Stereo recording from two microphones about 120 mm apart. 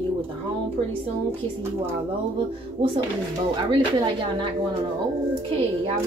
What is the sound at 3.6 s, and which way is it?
Speech, 45° right (ahead or behind).